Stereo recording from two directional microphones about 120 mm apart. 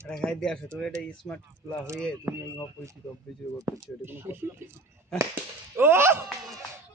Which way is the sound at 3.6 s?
20° right (ahead or behind).